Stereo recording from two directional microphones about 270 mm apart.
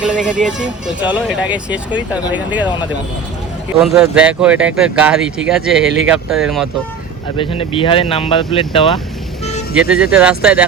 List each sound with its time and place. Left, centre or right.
0.0 s speech: centre
3.8 s speech: centre
7.3 s speech: left
9.7 s speech: centre